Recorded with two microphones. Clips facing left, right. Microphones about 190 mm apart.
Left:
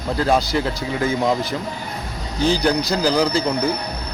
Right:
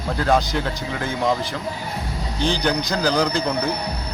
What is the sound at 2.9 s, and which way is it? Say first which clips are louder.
Speech: left 2 dB; 5° left (ahead or behind).